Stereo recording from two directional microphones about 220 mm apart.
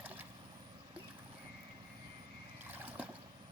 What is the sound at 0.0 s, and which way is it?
Vehicle, 5° right (ahead or behind).